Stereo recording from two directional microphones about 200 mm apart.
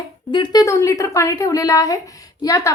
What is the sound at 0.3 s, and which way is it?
A woman's voice, 25° left (ahead or behind).